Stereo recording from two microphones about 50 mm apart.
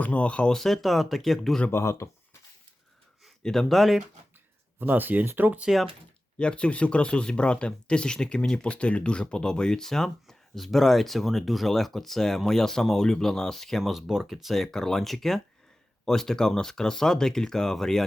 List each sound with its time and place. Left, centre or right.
0.0 s speech: left
0.5 s speech: centre
1.7 s speech: left
3.4 s speech: centre
4.8 s speech: right
5.7 s speech: centre
6.4 s speech: left; by 13.9 s centre
13.9 s speech: centre